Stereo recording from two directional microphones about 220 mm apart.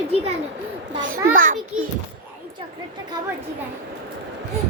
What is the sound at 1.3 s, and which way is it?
Speech, 35° right (ahead or behind).